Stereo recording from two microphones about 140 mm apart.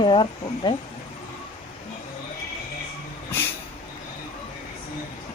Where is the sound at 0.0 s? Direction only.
35° left (ahead or behind).